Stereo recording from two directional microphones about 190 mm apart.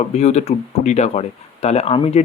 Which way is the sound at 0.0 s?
35° left (ahead or behind).